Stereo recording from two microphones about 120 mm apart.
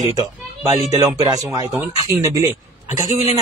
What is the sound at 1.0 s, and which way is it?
A man's voice, 30° right (ahead or behind).